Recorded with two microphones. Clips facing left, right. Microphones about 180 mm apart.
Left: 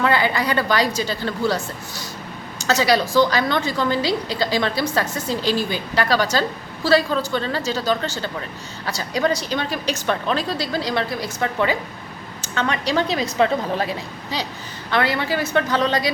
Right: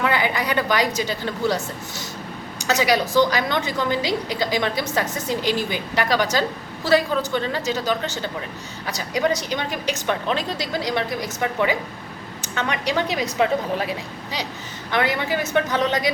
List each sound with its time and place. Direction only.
0.0 s a woman's voice: 15° right (ahead or behind)